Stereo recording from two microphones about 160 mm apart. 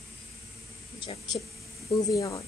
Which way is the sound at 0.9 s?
30° left (ahead or behind).